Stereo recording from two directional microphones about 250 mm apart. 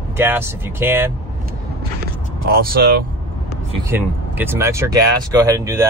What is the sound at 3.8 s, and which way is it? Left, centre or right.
Speech, centre.